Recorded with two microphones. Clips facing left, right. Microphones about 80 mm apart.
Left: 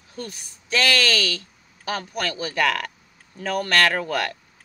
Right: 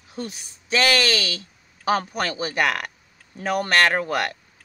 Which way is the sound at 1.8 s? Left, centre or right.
Right.